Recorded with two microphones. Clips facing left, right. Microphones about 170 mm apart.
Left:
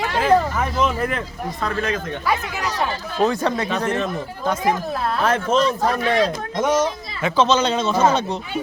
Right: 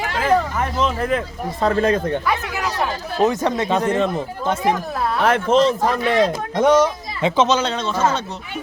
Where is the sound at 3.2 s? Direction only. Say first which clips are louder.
Right 1 dB; 20° right (ahead or behind).